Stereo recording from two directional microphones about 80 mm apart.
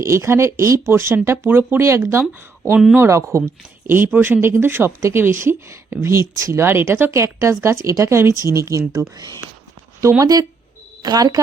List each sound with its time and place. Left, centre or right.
0.0 s speech: right
3.8 s speech: right
9.1 s speech: right
10.0 s speech: right
11.0 s a woman's voice: right